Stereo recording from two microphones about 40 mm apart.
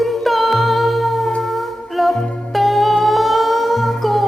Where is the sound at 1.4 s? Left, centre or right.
Centre.